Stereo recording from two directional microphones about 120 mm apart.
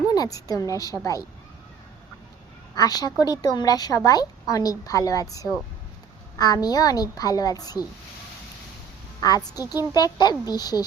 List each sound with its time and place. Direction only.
0.1 s a woman's voice: 30° left (ahead or behind)
2.7 s a woman's voice: 35° left (ahead or behind)
9.2 s a woman's voice: 30° left (ahead or behind)